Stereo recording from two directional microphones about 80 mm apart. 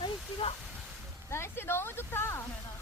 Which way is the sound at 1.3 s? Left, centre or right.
Left.